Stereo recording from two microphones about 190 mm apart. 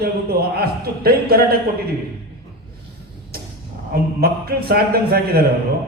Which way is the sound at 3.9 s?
55° right (ahead or behind).